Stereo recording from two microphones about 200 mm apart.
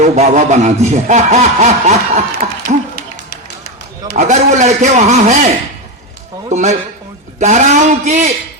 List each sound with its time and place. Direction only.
0.0 s a man's voice: 35° right (ahead or behind)
2.7 s dog: 35° right (ahead or behind)
4.1 s a man's voice: 35° right (ahead or behind)
6.5 s a man's voice: 35° right (ahead or behind)